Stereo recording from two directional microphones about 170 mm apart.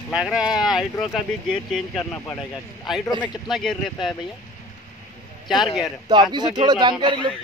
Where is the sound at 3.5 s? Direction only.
Centre (ahead or behind).